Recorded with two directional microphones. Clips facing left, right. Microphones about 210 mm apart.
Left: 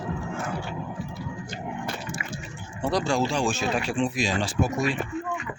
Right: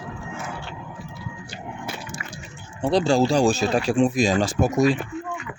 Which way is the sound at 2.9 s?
30° right (ahead or behind).